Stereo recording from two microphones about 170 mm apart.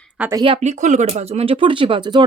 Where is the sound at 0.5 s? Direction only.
40° right (ahead or behind).